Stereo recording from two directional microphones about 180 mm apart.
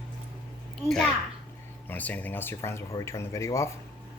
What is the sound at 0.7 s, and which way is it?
A child's voice, centre (ahead or behind).